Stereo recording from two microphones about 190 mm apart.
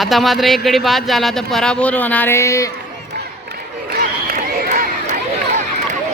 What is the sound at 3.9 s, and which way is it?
Crowd, 55° right (ahead or behind).